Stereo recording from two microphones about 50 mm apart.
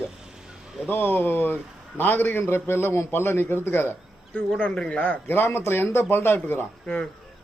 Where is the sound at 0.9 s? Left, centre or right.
Left.